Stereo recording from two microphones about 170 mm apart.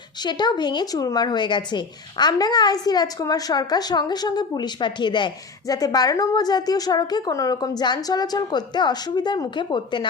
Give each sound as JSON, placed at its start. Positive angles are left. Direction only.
{"t": 0.2, "sound": "speech", "side_deg": 25}